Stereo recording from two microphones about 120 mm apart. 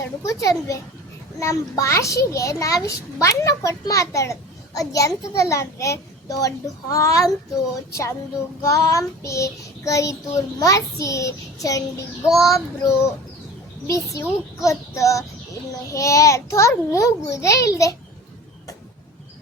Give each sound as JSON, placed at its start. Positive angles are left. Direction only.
{"t": 0.3, "sound": "a child's voice", "side_deg": 30}
{"t": 8.6, "sound": "a child's voice", "side_deg": 30}
{"t": 12.3, "sound": "child singing", "side_deg": 0}
{"t": 12.5, "sound": "a child's voice", "side_deg": 25}